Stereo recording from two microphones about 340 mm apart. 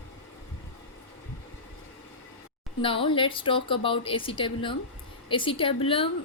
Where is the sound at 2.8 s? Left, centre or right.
Centre.